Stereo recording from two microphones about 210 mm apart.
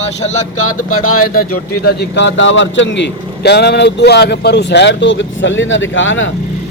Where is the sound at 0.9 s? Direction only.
90° left.